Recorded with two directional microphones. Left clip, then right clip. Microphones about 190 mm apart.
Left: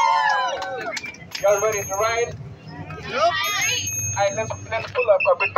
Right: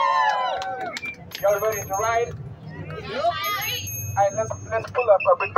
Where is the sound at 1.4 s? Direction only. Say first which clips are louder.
Left 2 dB; 15° right (ahead or behind).